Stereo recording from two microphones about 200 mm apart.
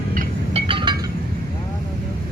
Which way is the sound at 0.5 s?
25° right (ahead or behind).